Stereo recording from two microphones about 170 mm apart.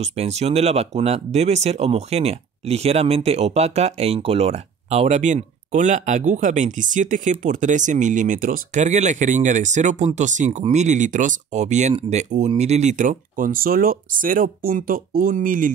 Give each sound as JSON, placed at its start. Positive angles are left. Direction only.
{"t": 0.0, "sound": "speech", "side_deg": -40}